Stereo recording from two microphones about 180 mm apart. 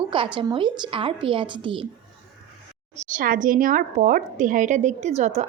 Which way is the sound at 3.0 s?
50° right (ahead or behind).